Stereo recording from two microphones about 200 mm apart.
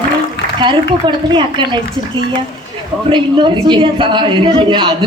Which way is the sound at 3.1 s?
25° right (ahead or behind).